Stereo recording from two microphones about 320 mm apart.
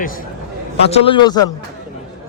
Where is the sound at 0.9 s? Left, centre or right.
Centre.